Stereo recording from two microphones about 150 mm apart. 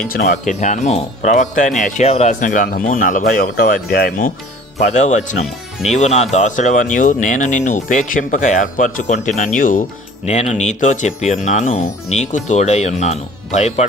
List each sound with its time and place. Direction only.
0.1 s speech: 70° left (ahead or behind); by 2.3 s 45° left (ahead or behind)
2.4 s speech: 65° left (ahead or behind); by 4.3 s 85° left
4.9 s speech: 50° left (ahead or behind)
10.2 s speech: 50° left (ahead or behind)